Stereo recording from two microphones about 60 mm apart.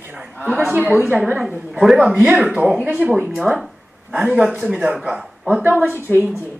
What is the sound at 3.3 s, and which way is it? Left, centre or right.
Speech, centre.